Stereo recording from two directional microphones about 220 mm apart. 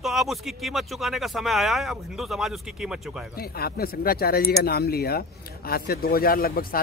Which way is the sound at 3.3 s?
45° left (ahead or behind).